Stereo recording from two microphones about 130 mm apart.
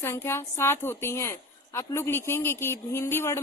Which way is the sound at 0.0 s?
20° left (ahead or behind).